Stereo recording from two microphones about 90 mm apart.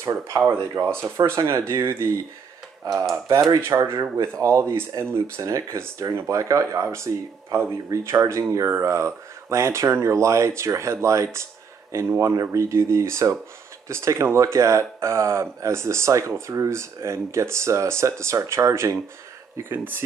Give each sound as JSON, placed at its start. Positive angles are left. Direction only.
{"t": 0.0, "sound": "speech", "side_deg": -25}
{"t": 2.8, "sound": "speech", "side_deg": -45}
{"t": 3.6, "sound": "speech", "side_deg": -30}